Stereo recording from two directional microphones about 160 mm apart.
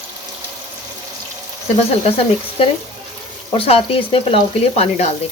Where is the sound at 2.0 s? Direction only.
40° left (ahead or behind).